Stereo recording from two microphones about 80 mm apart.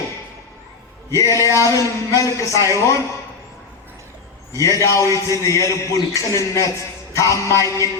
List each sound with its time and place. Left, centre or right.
1.1 s music: left
1.4 s a sound: right
1.7 s a man's voice: left
2.6 s music: left
4.5 s music: left
5.4 s a man's voice: left
6.7 s music: left